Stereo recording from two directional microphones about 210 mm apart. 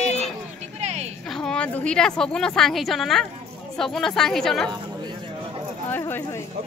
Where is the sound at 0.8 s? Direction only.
30° right (ahead or behind).